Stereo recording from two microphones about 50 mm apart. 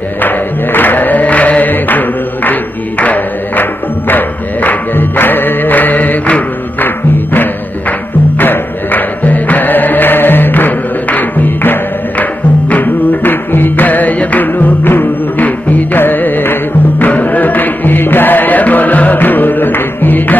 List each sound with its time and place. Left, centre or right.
0.2 s choir: left
4.1 s music: left
8.4 s music: left